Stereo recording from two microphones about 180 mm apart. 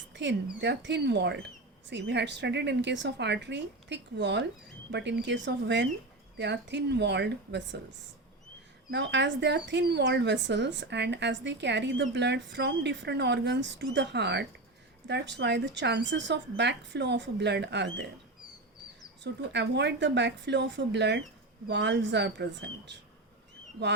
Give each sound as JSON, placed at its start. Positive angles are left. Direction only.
{"t": 0.1, "sound": "a sound", "side_deg": -80}
{"t": 0.6, "sound": "speech", "side_deg": -75}
{"t": 8.9, "sound": "speech", "side_deg": -75}
{"t": 19.2, "sound": "speech", "side_deg": -75}